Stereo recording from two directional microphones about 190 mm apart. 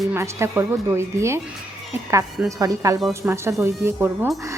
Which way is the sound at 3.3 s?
15° right (ahead or behind).